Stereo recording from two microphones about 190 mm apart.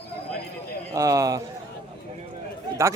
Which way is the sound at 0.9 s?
15° right (ahead or behind).